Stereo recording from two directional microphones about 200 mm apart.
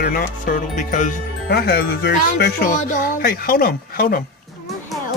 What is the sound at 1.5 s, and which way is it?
Speech, 55° left (ahead or behind).